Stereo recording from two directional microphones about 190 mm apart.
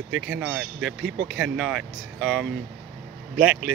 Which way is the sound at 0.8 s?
65° right (ahead or behind).